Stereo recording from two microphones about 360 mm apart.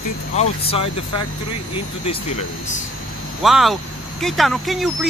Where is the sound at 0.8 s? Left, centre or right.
Left.